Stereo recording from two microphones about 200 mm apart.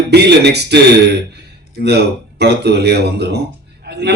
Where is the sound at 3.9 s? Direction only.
60° right (ahead or behind).